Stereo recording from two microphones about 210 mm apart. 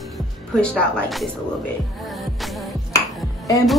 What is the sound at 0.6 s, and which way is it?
Speech, 5° left (ahead or behind).